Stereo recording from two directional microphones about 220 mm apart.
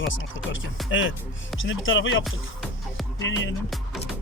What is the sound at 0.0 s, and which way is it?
Speech, 60° left (ahead or behind).